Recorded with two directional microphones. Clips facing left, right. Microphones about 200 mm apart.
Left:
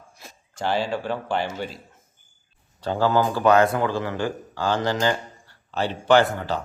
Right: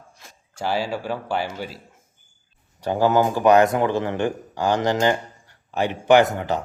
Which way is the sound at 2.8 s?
15° right (ahead or behind).